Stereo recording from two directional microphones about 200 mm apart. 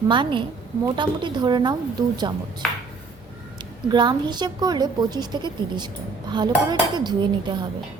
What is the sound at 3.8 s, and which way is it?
A woman's voice, 20° right (ahead or behind).